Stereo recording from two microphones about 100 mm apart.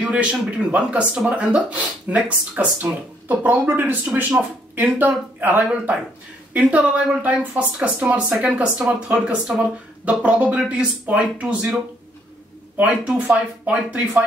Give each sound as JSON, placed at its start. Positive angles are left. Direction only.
{"t": 0.0, "sound": "speech", "side_deg": -10}